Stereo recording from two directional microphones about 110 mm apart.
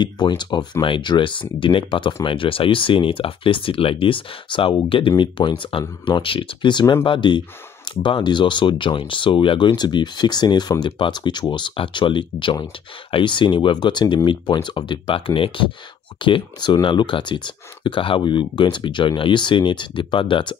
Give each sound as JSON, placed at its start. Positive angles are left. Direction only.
{"t": 0.0, "sound": "speech", "side_deg": 45}